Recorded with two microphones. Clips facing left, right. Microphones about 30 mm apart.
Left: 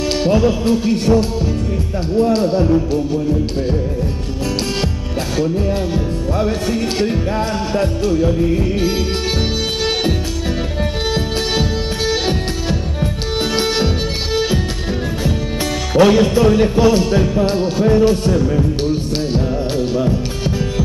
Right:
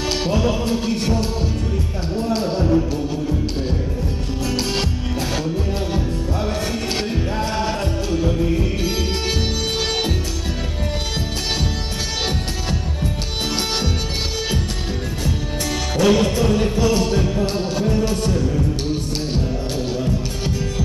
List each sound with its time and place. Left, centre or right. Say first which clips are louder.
0.5 s a man's voice: left 5 dB; centre
2.6 s music: left 3 dB; centre
5.9 s music: left 4 dB; centre
12.3 s music: left 5 dB; centre
16.1 s music: left 5 dB; centre